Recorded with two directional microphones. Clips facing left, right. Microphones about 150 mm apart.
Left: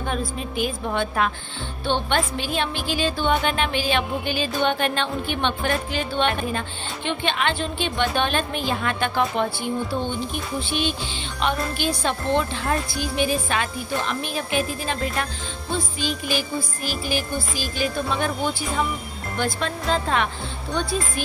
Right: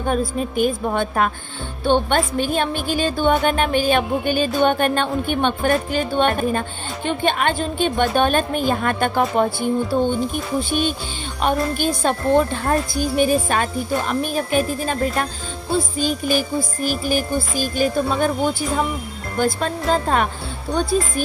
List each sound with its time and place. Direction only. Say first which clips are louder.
0.0 s a woman's voice: right 6 dB; 45° right (ahead or behind)
11.4 s a woman's voice: right 4 dB; 45° right (ahead or behind)